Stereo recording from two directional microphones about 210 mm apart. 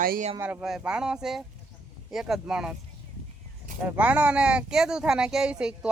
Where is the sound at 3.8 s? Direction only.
5° right (ahead or behind).